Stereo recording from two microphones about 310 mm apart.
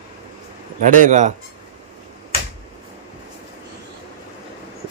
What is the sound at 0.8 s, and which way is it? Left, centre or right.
Speech, right.